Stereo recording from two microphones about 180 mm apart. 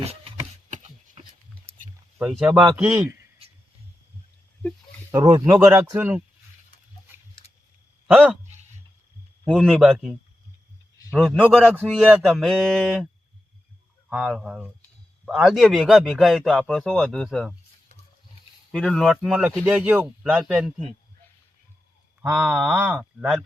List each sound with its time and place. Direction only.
0.7 s chopping: 40° right (ahead or behind)
2.4 s a man's voice: 5° right (ahead or behind)
5.1 s speech: 20° right (ahead or behind)
8.0 s speech: centre (ahead or behind)
9.4 s a man's voice: centre (ahead or behind)
14.1 s a man's voice: centre (ahead or behind)
18.7 s a man's voice: 5° left (ahead or behind)
22.2 s a man's voice: 5° right (ahead or behind)